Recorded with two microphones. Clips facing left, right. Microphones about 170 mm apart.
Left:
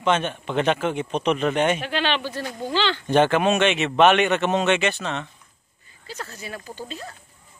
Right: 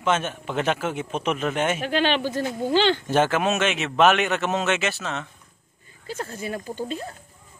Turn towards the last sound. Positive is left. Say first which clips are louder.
# right 6 dB
turn(degrees=-50)  # may be behind; listen again after turning